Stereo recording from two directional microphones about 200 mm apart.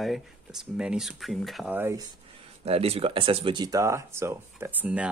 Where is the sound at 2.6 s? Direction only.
30° right (ahead or behind); by 5.0 s 5° right (ahead or behind).